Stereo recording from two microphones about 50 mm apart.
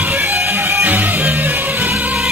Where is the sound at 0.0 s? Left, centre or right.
Right.